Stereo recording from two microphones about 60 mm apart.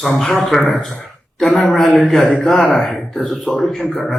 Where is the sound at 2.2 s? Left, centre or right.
Left.